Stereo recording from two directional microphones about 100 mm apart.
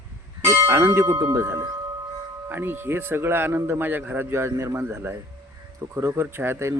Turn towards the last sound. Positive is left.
turn(degrees=-25)  # may be behind; listen again after turning